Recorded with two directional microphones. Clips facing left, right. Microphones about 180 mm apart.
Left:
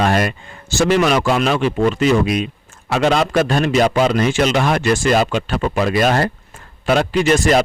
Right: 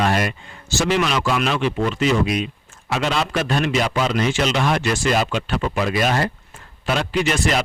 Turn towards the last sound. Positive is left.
turn(degrees=45)  # may be behind; listen again after turning